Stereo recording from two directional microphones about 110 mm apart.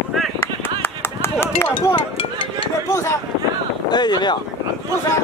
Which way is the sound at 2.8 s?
25° left (ahead or behind).